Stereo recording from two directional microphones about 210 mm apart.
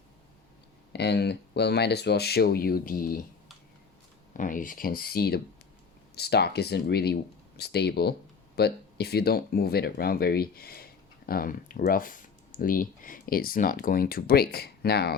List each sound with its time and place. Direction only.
0.9 s speech: 55° left (ahead or behind)
4.4 s speech: 40° left (ahead or behind)